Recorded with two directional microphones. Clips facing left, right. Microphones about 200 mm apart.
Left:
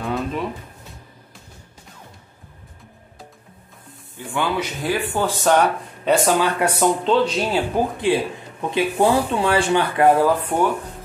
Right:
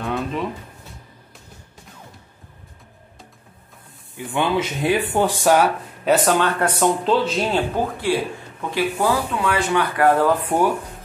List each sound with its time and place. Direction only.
0.0 s a sound: centre (ahead or behind)
4.3 s speech: 20° right (ahead or behind); by 6.4 s centre (ahead or behind)
6.4 s speech: 10° left (ahead or behind)
7.1 s speech: centre (ahead or behind)
7.7 s speech: 20° left (ahead or behind)